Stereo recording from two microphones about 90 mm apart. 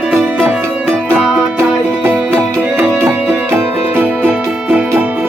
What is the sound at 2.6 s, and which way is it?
Music, 25° right (ahead or behind).